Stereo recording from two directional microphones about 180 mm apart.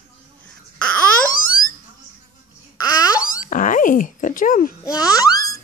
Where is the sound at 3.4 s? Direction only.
45° left (ahead or behind).